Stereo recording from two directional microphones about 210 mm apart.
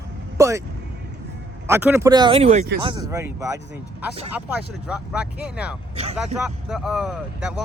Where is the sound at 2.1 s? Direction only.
25° right (ahead or behind).